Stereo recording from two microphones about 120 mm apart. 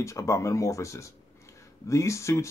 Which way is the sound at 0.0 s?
25° left (ahead or behind).